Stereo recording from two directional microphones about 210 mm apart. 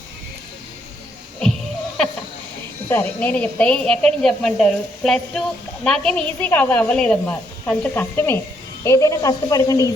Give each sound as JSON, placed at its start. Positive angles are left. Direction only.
{"t": 2.9, "sound": "a woman's voice", "side_deg": 10}